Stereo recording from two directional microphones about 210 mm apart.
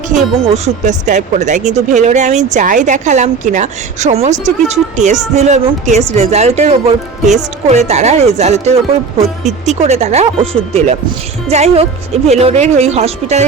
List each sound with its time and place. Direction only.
0.4 s a woman's voice: 30° right (ahead or behind)